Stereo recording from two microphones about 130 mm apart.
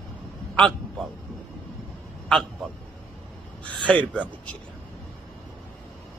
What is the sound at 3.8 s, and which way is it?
Speech, 10° left (ahead or behind).